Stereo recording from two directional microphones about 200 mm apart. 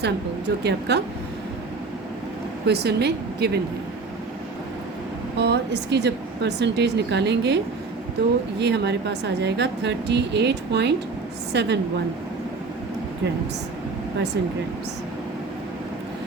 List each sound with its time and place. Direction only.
0.0 s a woman's voice: 55° right (ahead or behind)
2.6 s a woman's voice: 55° right (ahead or behind)
5.4 s a woman's voice: 55° right (ahead or behind)